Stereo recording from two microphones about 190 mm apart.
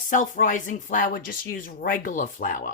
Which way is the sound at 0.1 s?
45° left (ahead or behind).